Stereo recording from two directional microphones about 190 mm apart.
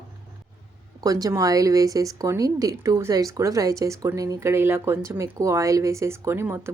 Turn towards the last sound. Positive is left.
turn(degrees=-15)  # may be behind; listen again after turning